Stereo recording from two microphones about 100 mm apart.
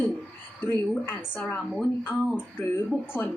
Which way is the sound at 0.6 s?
15° left (ahead or behind).